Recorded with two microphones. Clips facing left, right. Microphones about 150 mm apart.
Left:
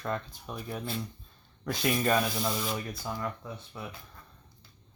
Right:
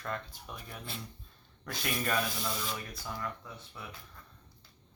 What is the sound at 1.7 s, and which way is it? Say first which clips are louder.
Speech: left 7 dB; 25° left (ahead or behind).